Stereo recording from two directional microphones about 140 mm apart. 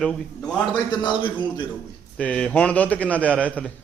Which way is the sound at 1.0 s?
35° left (ahead or behind).